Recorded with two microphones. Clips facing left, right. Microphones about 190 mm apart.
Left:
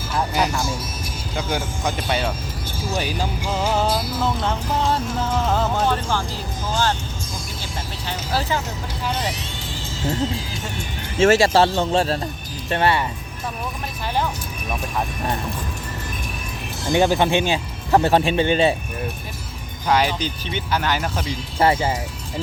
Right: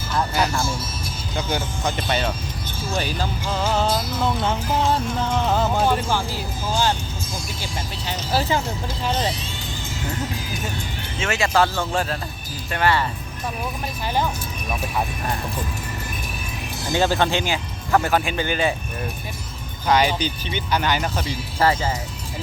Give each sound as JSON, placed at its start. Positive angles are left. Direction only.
{"t": 0.1, "sound": "speech", "side_deg": 15}
{"t": 2.9, "sound": "music", "side_deg": 15}
{"t": 8.3, "sound": "speech", "side_deg": -15}
{"t": 10.0, "sound": "speech", "side_deg": 25}
{"t": 14.7, "sound": "music", "side_deg": -5}
{"t": 16.9, "sound": "speech", "side_deg": 15}
{"t": 19.9, "sound": "music", "side_deg": 0}
{"t": 21.6, "sound": "speech", "side_deg": 25}